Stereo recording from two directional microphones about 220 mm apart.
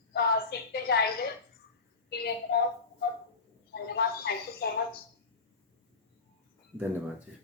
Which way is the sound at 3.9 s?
45° left (ahead or behind).